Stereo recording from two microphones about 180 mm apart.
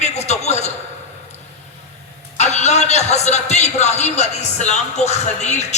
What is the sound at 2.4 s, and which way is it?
A man's voice, 40° left (ahead or behind).